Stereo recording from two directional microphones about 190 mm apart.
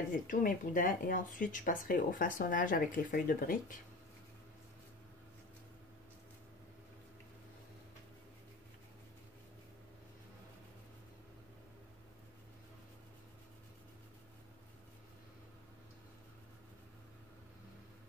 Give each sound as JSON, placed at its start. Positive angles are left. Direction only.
{"t": 0.1, "sound": "speech", "side_deg": 45}